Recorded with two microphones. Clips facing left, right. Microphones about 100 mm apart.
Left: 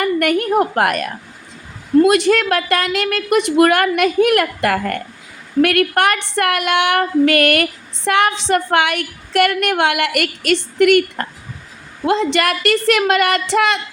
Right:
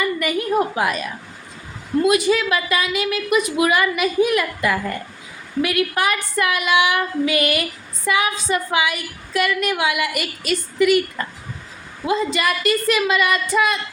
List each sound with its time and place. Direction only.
0.0 s female singing: 65° left (ahead or behind)
2.0 s a woman's voice: 65° left (ahead or behind)
5.6 s female singing: 65° left (ahead or behind)
12.0 s a woman's voice: 70° left (ahead or behind)